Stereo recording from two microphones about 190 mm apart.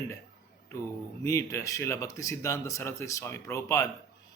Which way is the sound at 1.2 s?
15° left (ahead or behind).